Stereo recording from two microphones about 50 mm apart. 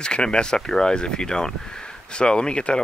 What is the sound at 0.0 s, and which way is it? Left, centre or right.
Speech, centre.